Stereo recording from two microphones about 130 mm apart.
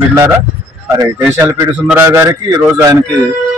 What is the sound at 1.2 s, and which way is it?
Speech, 20° right (ahead or behind).